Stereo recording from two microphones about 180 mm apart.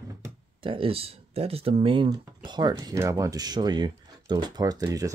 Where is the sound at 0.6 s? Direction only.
30° right (ahead or behind).